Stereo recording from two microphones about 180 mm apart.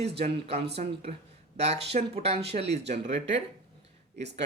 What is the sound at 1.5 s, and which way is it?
Speech, 35° right (ahead or behind).